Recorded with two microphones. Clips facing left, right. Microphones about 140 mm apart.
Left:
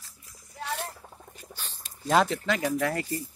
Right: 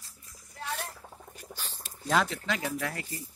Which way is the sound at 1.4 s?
Centre (ahead or behind).